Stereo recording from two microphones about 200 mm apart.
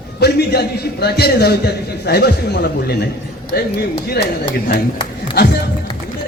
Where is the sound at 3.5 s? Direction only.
50° left (ahead or behind).